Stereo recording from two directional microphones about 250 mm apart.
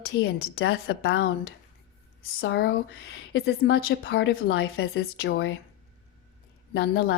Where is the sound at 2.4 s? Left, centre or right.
Left.